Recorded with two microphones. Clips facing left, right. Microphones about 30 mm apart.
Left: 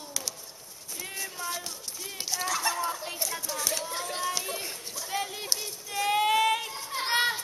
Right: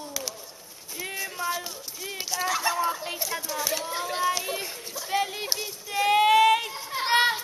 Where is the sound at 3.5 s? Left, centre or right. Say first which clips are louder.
Right 3 dB; centre.